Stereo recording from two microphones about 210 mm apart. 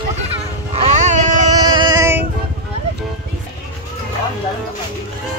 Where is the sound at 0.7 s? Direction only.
30° right (ahead or behind).